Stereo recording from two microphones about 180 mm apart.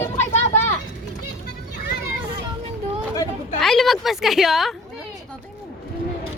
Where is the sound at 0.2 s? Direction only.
40° left (ahead or behind).